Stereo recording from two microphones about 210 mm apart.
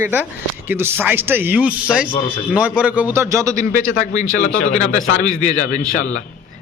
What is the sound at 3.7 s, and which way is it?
A man's voice, 40° left (ahead or behind).